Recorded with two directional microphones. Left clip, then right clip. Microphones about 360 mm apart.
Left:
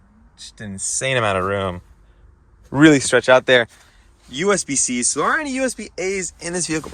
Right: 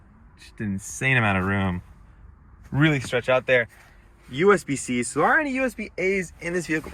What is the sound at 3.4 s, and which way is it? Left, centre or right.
Speech, left.